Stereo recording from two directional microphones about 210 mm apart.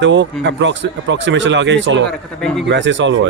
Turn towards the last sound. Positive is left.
turn(degrees=-60)  # may be behind; listen again after turning